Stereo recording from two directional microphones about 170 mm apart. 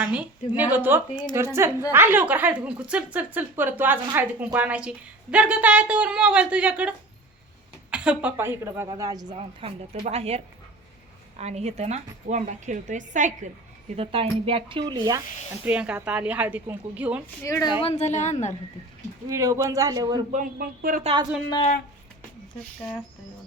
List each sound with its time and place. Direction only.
0.1 s a woman's voice: 10° right (ahead or behind)
1.1 s speech: 25° left (ahead or behind)
1.9 s a woman's voice: 10° right (ahead or behind)
9.3 s a woman's voice: 35° right (ahead or behind)
13.9 s speech: 35° right (ahead or behind)
15.6 s a woman's voice: 5° right (ahead or behind)
17.4 s a woman's voice: 20° left (ahead or behind); by 18.5 s 45° left (ahead or behind)
19.3 s speech: 15° right (ahead or behind)
20.3 s a woman's voice: 55° right (ahead or behind)
21.0 s speech: 30° right (ahead or behind)